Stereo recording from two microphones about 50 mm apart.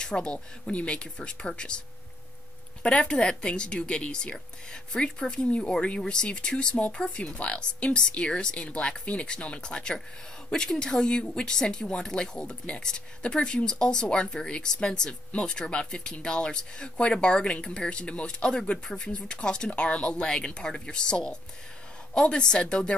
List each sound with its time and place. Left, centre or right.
0.0 s speech: centre
2.8 s speech: centre